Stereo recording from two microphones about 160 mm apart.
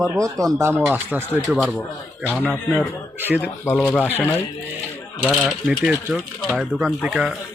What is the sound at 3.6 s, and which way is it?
Speech, 15° left (ahead or behind).